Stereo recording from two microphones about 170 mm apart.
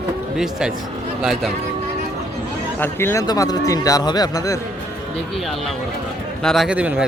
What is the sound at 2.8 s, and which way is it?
Speech, 15° left (ahead or behind).